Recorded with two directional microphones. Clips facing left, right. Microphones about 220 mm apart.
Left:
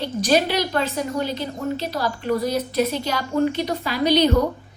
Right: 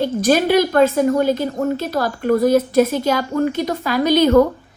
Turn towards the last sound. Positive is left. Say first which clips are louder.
# right 5 dB
turn(degrees=-50)  # may be behind; listen again after turning